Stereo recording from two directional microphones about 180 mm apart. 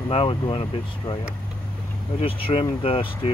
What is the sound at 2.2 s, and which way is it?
Speech, 30° left (ahead or behind).